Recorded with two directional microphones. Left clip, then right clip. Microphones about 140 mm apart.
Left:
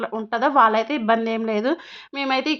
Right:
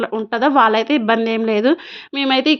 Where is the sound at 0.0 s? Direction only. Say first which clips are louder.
Right 4 dB; 25° right (ahead or behind).